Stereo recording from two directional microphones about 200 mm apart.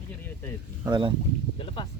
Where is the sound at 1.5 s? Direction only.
25° left (ahead or behind).